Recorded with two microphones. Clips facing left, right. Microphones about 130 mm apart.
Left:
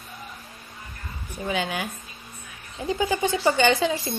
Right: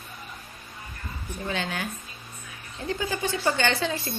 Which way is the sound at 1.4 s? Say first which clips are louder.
Left 4 dB; 10° left (ahead or behind).